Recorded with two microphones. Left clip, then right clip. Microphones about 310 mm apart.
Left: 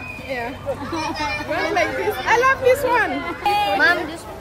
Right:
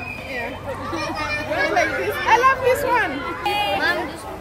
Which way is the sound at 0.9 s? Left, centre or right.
Right.